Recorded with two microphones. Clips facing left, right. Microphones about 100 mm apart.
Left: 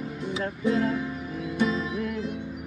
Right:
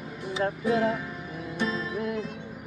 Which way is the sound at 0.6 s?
10° right (ahead or behind).